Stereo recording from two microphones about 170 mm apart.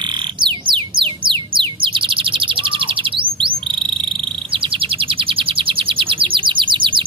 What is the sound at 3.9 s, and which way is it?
Chirp, 30° right (ahead or behind).